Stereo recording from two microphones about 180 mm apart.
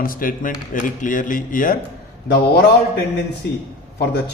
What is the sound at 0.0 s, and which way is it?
Speech, 50° left (ahead or behind).